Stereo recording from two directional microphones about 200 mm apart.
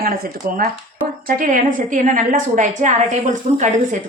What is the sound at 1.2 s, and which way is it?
A woman's voice, 45° right (ahead or behind).